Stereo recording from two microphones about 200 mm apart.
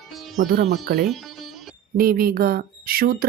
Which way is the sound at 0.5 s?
50° right (ahead or behind).